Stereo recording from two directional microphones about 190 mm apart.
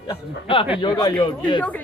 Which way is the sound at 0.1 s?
30° left (ahead or behind).